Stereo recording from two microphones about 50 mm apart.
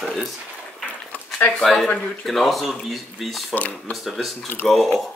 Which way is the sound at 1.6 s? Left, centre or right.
Centre.